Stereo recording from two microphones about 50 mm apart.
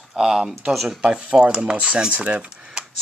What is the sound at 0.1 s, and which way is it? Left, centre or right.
Speech, centre.